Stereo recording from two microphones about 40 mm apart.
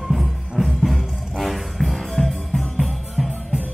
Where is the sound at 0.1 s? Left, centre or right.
Centre.